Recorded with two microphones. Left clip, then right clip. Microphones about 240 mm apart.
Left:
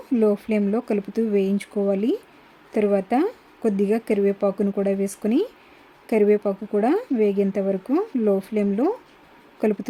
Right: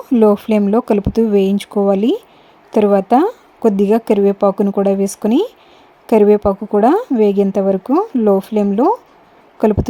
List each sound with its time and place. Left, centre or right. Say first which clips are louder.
0.1 s a woman's voice: right 9 dB; right
5.3 s speech: right 7 dB; centre
6.1 s a woman's voice: right 8 dB; right